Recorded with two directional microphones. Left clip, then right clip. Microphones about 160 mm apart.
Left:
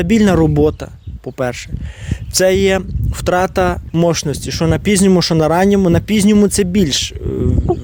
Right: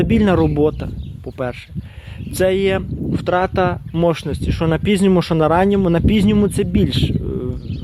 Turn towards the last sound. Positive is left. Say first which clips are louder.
# left 3 dB
turn(degrees=30)  # may be behind; listen again after turning